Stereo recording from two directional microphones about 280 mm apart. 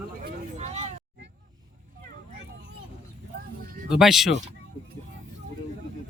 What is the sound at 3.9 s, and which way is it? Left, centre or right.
Speech, centre.